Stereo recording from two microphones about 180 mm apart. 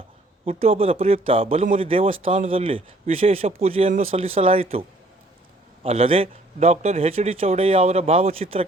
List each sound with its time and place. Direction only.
0.4 s a man's voice: 35° right (ahead or behind)